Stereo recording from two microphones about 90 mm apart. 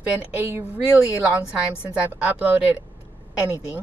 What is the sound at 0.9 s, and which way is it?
Speech, 10° right (ahead or behind).